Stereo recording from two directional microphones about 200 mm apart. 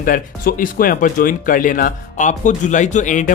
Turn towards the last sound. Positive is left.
turn(degrees=40)  # may be behind; listen again after turning